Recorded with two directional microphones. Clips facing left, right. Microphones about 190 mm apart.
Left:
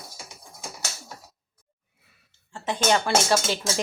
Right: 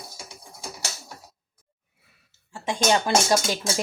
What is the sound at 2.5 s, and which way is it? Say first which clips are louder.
Speech: right 1 dB; 10° right (ahead or behind).